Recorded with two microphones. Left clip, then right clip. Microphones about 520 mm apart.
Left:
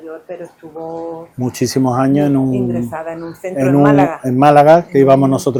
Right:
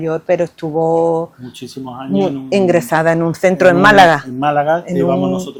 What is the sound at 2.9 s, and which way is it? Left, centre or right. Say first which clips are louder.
Speech: right 11 dB; right.